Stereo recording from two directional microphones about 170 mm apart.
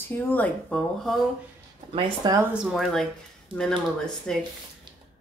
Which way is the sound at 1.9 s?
30° right (ahead or behind).